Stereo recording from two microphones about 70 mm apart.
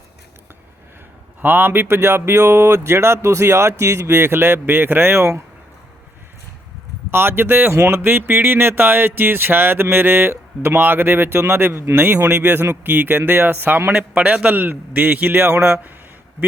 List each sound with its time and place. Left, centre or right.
1.4 s speech: right
7.1 s a man's voice: right
13.9 s a man's voice: centre